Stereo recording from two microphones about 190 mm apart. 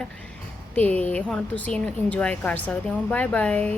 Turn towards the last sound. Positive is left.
turn(degrees=5)  # may be behind; listen again after turning